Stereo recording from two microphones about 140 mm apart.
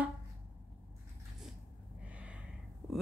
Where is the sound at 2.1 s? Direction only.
10° right (ahead or behind).